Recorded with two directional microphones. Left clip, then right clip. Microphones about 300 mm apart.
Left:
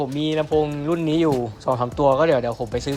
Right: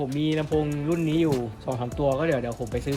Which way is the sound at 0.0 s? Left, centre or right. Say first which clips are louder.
Left 4 dB; centre.